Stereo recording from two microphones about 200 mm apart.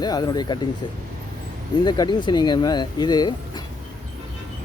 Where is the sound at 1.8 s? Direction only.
20° left (ahead or behind).